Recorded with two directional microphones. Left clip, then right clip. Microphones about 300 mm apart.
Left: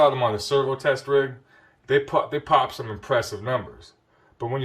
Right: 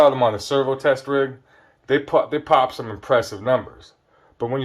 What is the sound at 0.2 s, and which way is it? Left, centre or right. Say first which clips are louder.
Speech: right 3 dB; centre.